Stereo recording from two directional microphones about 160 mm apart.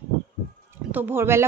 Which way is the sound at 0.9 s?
10° right (ahead or behind).